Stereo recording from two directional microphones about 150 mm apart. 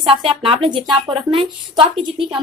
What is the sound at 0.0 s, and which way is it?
A woman's voice, 35° right (ahead or behind).